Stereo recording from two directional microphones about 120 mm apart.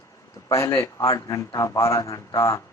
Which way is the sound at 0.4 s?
25° left (ahead or behind).